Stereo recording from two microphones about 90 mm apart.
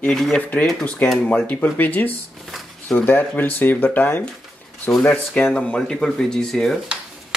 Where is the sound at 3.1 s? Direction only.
20° left (ahead or behind).